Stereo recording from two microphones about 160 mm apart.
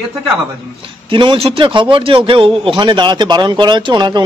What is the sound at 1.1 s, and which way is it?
A man's voice, 30° right (ahead or behind).